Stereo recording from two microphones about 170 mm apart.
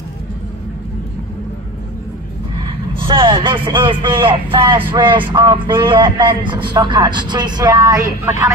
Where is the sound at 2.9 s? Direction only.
30° right (ahead or behind).